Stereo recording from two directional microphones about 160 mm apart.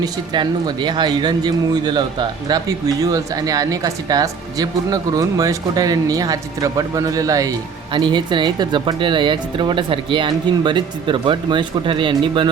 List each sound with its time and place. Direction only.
0.0 s speech: 30° right (ahead or behind)